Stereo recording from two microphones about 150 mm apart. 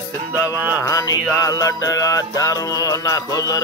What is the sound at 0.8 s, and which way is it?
Music, 25° left (ahead or behind).